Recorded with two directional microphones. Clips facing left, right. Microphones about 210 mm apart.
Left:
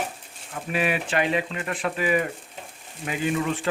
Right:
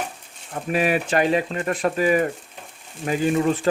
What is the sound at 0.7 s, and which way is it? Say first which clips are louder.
Speech: right 4 dB; 40° right (ahead or behind).